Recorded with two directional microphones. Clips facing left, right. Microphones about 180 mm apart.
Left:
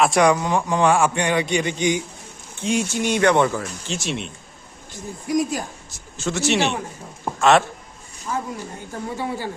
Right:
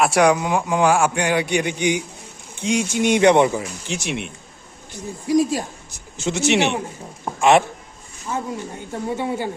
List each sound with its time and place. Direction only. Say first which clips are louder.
0.0 s speech: right 1 dB; 5° right (ahead or behind)
0.9 s speech: even; centre (ahead or behind)
5.3 s a man's voice: right 4 dB; 30° right (ahead or behind)
8.9 s speech: right 3 dB; 25° right (ahead or behind)